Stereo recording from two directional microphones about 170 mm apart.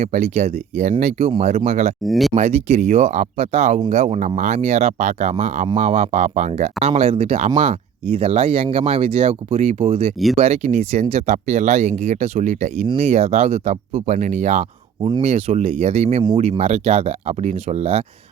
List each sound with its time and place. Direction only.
0.0 s speech: 40° right (ahead or behind)
2.0 s speech: centre (ahead or behind)
2.3 s speech: 40° right (ahead or behind)
15.0 s speech: 35° right (ahead or behind)